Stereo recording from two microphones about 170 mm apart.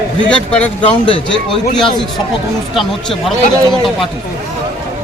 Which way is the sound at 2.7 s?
Centre (ahead or behind).